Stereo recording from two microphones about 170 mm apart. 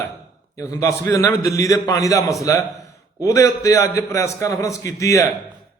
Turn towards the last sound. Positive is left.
turn(degrees=20)  # may be behind; listen again after turning